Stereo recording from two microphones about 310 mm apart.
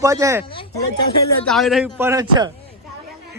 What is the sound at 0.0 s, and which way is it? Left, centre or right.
Speech, centre.